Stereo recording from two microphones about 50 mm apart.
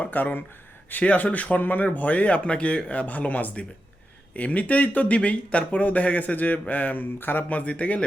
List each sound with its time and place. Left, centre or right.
0.0 s speech: left
7.5 s speech: left